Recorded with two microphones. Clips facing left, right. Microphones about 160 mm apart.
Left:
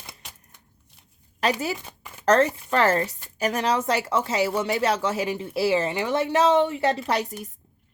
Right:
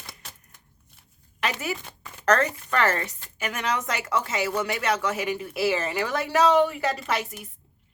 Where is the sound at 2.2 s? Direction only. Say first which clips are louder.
Left 3 dB; 30° left (ahead or behind).